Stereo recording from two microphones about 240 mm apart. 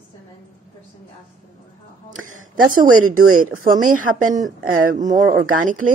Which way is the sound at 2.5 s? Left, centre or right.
Right.